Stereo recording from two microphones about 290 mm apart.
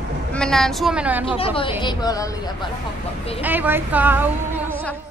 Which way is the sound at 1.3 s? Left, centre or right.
Centre.